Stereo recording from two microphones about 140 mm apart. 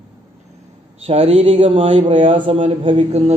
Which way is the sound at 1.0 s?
45° right (ahead or behind).